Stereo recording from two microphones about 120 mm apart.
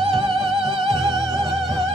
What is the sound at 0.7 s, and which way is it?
Music, 40° right (ahead or behind).